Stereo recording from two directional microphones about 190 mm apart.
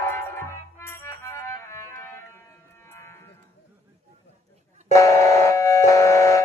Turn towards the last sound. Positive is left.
turn(degrees=15)  # may be behind; listen again after turning